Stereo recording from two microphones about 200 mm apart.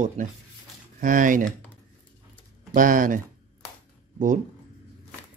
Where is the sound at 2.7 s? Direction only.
40° right (ahead or behind).